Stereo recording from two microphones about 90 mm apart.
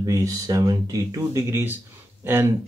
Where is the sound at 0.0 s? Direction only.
40° right (ahead or behind).